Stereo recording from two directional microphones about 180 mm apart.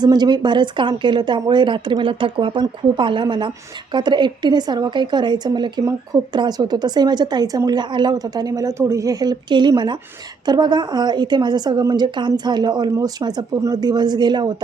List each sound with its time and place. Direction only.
0.0 s a woman's voice: 25° right (ahead or behind)